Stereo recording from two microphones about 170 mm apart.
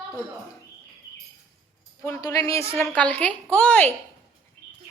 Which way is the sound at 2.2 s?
20° left (ahead or behind).